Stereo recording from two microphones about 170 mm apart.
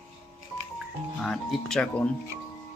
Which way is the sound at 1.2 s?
Centre (ahead or behind).